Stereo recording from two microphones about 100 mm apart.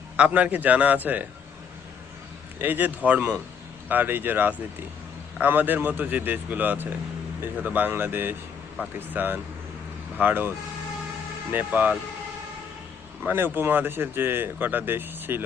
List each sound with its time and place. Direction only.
0.2 s a man's voice: 15° right (ahead or behind)
2.6 s a man's voice: 20° right (ahead or behind)
11.5 s a man's voice: 15° right (ahead or behind)
13.2 s speech: 20° right (ahead or behind)